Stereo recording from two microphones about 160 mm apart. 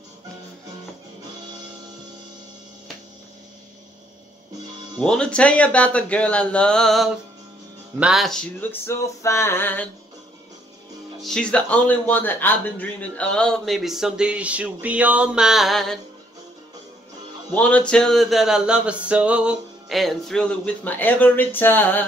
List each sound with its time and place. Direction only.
4.9 s speech: 5° left (ahead or behind)
8.8 s speech: 20° left (ahead or behind)
11.1 s speech: 5° left (ahead or behind)
17.6 s speech: 10° left (ahead or behind)